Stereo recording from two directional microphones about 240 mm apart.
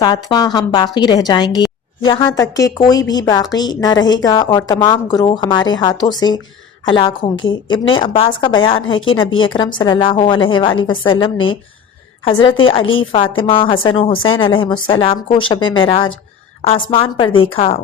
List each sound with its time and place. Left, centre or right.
0.0 s a woman's voice: centre